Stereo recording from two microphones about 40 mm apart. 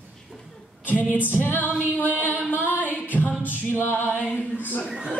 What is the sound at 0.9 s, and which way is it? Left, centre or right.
Female singing, left.